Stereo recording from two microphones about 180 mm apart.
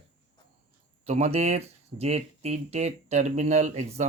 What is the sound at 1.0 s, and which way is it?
Speech, 35° right (ahead or behind).